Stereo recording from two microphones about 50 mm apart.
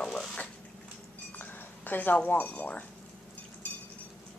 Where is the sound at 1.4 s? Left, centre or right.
Left.